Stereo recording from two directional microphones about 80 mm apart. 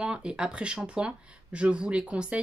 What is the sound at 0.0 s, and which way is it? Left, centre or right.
Speech, centre.